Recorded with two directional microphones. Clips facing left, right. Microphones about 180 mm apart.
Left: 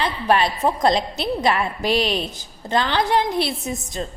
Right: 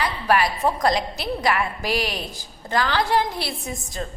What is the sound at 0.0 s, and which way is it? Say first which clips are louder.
A woman's voice: left 2 dB; 25° left (ahead or behind).